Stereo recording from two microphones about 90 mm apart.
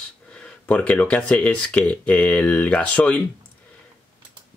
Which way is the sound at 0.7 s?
15° left (ahead or behind).